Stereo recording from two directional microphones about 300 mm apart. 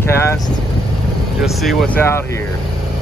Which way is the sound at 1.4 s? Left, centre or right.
Centre.